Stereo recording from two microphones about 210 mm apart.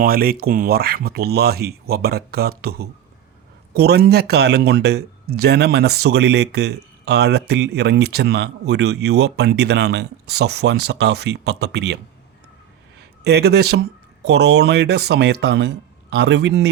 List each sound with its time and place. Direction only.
0.0 s speech: 45° right (ahead or behind)
13.2 s speech: 50° right (ahead or behind)